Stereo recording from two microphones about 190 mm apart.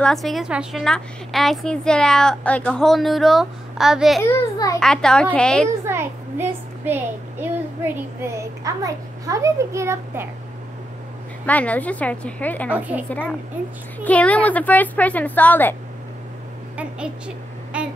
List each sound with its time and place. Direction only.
0.0 s a woman's voice: centre (ahead or behind)
4.2 s a woman's voice: 15° left (ahead or behind)
4.7 s a woman's voice: 5° left (ahead or behind)
5.9 s a sound: 10° right (ahead or behind)
11.4 s a woman's voice: 10° left (ahead or behind)
12.7 s a woman's voice: 10° right (ahead or behind)
14.0 s a woman's voice: 10° left (ahead or behind)
17.7 s a sound: 5° right (ahead or behind)